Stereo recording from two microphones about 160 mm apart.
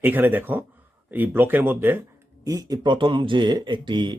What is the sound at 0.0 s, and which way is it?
Speech, 10° right (ahead or behind).